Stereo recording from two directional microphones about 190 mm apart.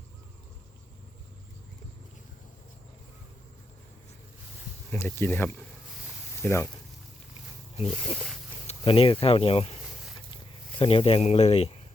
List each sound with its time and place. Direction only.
4.9 s speech: 10° left (ahead or behind)
7.9 s speech: centre (ahead or behind)
8.6 s speech: 30° left (ahead or behind)